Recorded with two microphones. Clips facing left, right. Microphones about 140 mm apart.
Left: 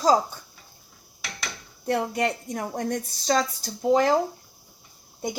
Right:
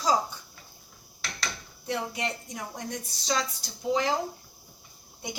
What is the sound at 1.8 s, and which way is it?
A woman's voice, 55° left (ahead or behind).